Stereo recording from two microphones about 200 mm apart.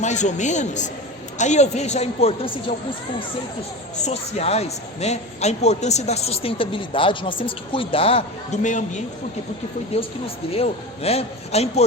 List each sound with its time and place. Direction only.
0.0 s a man's voice: 35° left (ahead or behind)
4.0 s a man's voice: 30° left (ahead or behind)
9.9 s a man's voice: 30° left (ahead or behind)